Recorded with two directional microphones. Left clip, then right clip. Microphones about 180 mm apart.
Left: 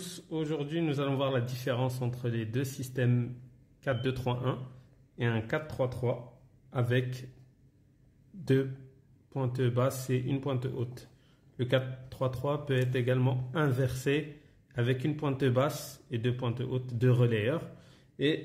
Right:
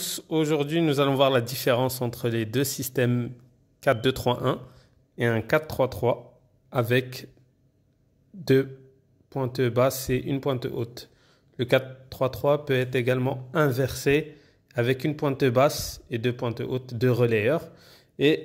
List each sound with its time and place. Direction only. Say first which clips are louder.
0.0 s a man's voice: right 10 dB; 45° right (ahead or behind)
9.3 s a man's voice: right 7 dB; 35° right (ahead or behind)